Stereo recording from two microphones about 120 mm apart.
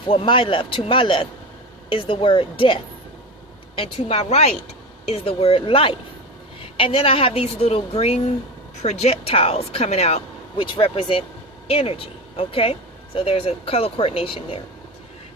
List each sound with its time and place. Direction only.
0.1 s speech: 50° left (ahead or behind)
3.8 s speech: 55° left (ahead or behind)